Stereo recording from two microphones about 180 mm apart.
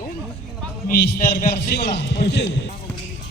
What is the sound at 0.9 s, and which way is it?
A man's voice, 60° left (ahead or behind).